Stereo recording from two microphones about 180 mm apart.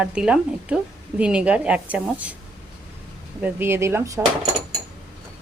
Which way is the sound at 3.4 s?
15° right (ahead or behind).